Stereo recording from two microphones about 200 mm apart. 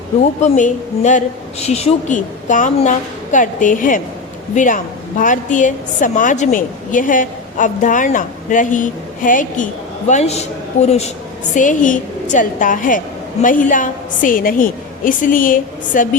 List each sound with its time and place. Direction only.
0.5 s a woman's voice: 40° left (ahead or behind)